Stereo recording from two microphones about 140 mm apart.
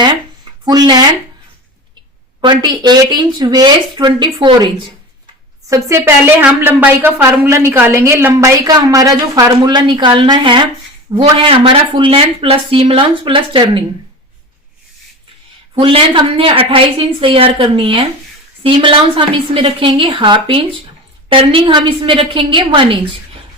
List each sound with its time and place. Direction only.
0.6 s a sound: 30° right (ahead or behind)
2.4 s speech: 30° right (ahead or behind)
5.6 s a woman's voice: 25° right (ahead or behind)
15.8 s speech: 40° right (ahead or behind)